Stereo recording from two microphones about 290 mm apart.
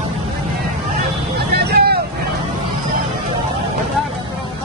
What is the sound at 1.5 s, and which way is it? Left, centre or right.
Vehicle, right.